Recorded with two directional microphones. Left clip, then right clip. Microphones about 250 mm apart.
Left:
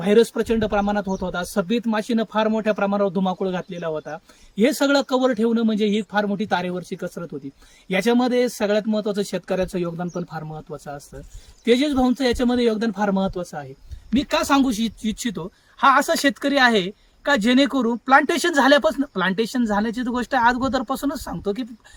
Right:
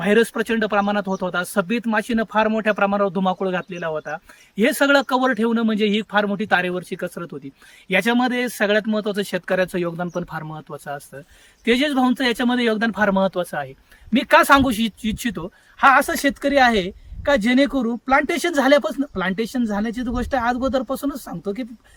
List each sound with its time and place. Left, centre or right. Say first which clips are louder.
0.0 s speech: left 1 dB; centre
14.7 s speech: right 2 dB; right
16.0 s speech: even; centre